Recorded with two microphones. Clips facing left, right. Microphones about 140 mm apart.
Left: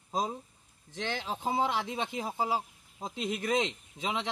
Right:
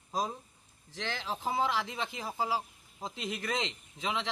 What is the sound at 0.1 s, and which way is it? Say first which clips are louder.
A man's voice: left 2 dB; 25° left (ahead or behind).